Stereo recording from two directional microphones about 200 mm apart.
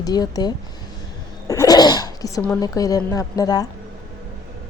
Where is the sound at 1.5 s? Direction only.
20° left (ahead or behind).